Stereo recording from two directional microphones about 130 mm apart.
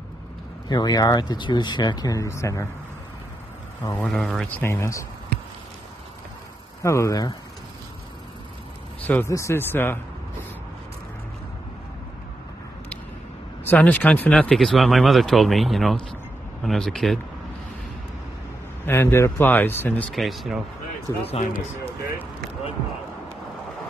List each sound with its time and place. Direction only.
0.7 s speech: 30° left (ahead or behind)
4.0 s speech: 5° left (ahead or behind); by 5.0 s 20° left (ahead or behind)
6.8 s speech: 25° left (ahead or behind)
9.0 s speech: 15° left (ahead or behind)
13.7 s speech: 15° left (ahead or behind)
18.9 s speech: 20° left (ahead or behind)
20.1 s speech: centre (ahead or behind)
21.3 s speech: 60° left (ahead or behind)